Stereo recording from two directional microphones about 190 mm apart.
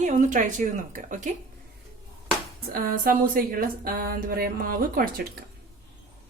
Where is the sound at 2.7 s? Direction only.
50° right (ahead or behind).